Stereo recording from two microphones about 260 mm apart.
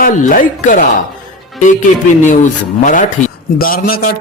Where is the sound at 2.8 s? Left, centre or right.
Left.